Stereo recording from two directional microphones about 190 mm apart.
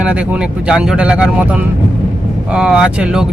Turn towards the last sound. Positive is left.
turn(degrees=-5)  # may be behind; listen again after turning